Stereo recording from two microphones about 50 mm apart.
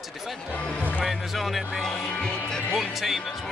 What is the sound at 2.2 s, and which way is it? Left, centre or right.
Speech, centre.